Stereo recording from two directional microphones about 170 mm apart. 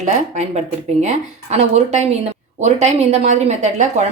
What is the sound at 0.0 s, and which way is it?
A woman's voice, 40° right (ahead or behind).